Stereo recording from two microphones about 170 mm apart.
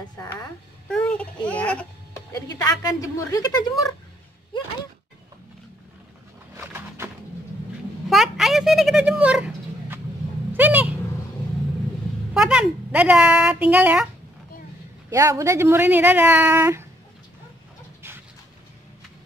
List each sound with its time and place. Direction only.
0.8 s a child's voice: 5° left (ahead or behind)
2.4 s a woman's voice: 20° left (ahead or behind)
6.5 s a sound: 15° right (ahead or behind)
8.1 s a sound: centre (ahead or behind)
12.4 s speech: 5° right (ahead or behind)
15.0 s speech: 15° right (ahead or behind)